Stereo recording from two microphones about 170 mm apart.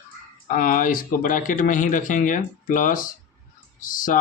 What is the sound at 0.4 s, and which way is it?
Speech, 55° left (ahead or behind).